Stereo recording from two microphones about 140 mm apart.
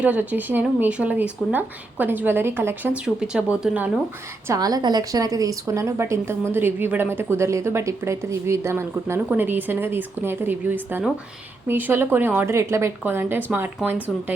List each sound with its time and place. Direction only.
0.0 s speech: 10° right (ahead or behind)
4.4 s a woman's voice: 25° right (ahead or behind)